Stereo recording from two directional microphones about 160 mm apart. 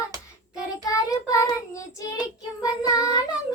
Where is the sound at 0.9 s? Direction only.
20° left (ahead or behind).